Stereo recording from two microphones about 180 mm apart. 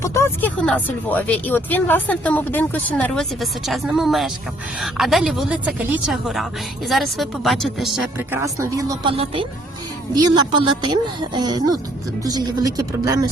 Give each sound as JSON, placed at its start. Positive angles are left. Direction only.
{"t": 0.0, "sound": "a woman's voice", "side_deg": 15}
{"t": 9.1, "sound": "speech", "side_deg": -30}